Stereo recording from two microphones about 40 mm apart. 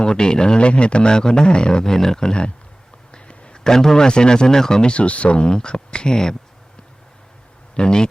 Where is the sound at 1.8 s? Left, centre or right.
Centre; by 5.5 s left.